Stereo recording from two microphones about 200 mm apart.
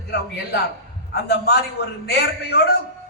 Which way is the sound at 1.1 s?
55° left (ahead or behind).